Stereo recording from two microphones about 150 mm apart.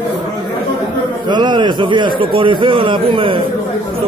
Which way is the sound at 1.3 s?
30° right (ahead or behind).